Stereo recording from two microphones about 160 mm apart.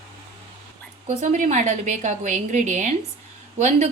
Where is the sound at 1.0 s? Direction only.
50° right (ahead or behind).